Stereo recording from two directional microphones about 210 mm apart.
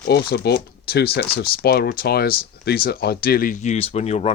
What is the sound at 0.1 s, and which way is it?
Speech, 50° left (ahead or behind).